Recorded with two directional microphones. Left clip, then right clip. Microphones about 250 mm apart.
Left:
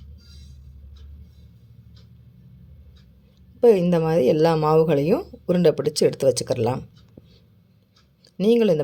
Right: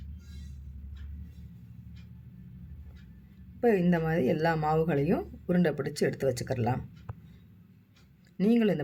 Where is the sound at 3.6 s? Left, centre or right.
Left.